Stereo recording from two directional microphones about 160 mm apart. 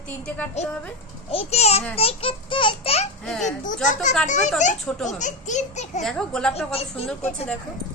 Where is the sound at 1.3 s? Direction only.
40° left (ahead or behind).